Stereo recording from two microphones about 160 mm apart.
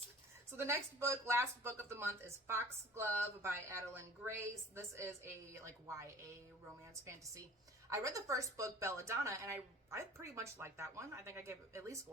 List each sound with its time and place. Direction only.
0.5 s a woman's voice: 15° right (ahead or behind)
7.9 s a woman's voice: 20° right (ahead or behind)